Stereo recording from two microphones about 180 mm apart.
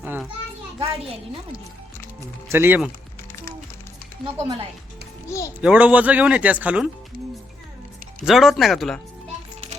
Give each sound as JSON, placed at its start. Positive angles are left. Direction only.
{"t": 0.0, "sound": "children playing", "side_deg": -10}
{"t": 0.8, "sound": "a child's voice", "side_deg": -30}
{"t": 2.5, "sound": "speech", "side_deg": -10}
{"t": 4.2, "sound": "speech", "side_deg": 0}
{"t": 5.5, "sound": "speech", "side_deg": -5}
{"t": 8.2, "sound": "speech", "side_deg": 0}